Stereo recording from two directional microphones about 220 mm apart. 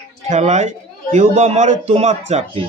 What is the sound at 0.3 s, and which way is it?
A man's voice, 30° right (ahead or behind).